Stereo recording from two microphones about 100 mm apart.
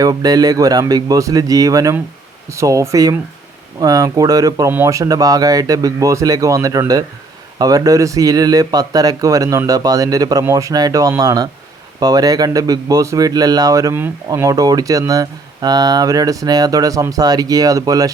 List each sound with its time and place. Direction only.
0.0 s speech: 40° right (ahead or behind)